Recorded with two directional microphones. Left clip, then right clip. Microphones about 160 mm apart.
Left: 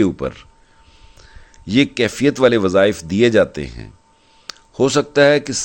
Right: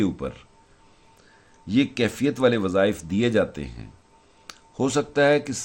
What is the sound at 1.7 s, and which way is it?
Speech, 50° left (ahead or behind).